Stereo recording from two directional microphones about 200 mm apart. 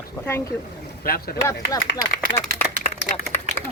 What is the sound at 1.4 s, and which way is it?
Speech, 15° left (ahead or behind).